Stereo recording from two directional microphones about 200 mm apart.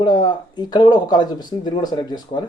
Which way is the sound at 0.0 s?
20° left (ahead or behind).